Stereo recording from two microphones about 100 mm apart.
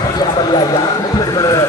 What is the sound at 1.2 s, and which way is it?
Speech, 40° left (ahead or behind).